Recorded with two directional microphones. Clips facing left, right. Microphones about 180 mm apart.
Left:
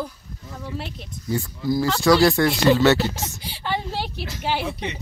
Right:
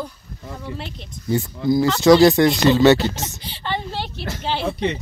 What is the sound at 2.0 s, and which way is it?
Speech, 20° right (ahead or behind).